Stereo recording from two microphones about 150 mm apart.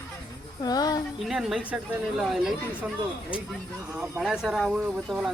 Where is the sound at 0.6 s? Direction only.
25° left (ahead or behind).